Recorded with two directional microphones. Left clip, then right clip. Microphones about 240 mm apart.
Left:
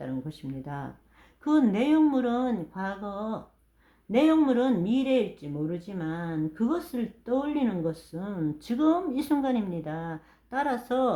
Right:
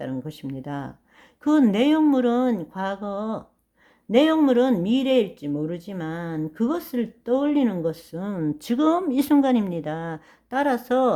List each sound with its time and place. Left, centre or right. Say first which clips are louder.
0.0 s speech: right 5 dB; right